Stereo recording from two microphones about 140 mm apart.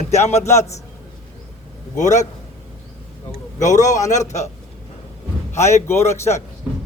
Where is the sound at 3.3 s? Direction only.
60° left (ahead or behind).